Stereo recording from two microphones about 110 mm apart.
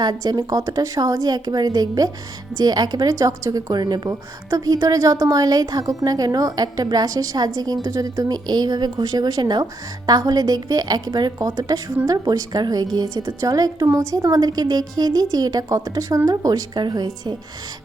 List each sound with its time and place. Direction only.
0.0 s a woman's voice: 40° right (ahead or behind)